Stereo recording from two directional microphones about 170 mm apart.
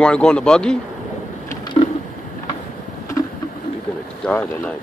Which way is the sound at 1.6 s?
25° left (ahead or behind).